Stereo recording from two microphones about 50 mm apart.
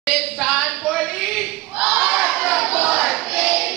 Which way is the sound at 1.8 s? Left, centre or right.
Right.